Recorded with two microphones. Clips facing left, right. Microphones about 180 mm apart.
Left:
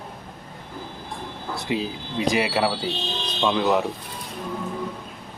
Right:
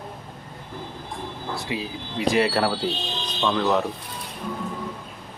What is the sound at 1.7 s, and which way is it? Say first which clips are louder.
Speech: left 6 dB; 25° left (ahead or behind).